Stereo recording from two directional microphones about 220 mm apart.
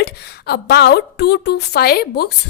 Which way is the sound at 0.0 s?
45° left (ahead or behind).